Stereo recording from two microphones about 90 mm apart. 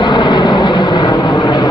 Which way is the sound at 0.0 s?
60° left (ahead or behind).